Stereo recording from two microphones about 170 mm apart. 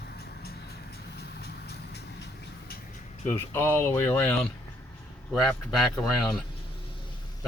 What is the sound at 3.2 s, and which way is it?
Speech, 15° left (ahead or behind).